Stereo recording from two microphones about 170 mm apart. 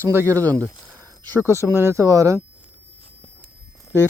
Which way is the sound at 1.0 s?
15° right (ahead or behind).